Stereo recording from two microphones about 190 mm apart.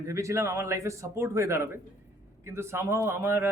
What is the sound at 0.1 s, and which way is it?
A man's voice, 15° right (ahead or behind).